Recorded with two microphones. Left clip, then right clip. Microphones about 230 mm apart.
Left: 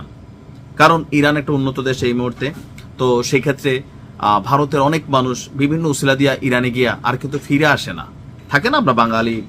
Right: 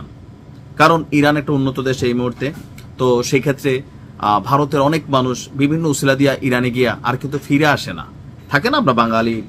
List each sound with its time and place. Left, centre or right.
0.8 s a man's voice: centre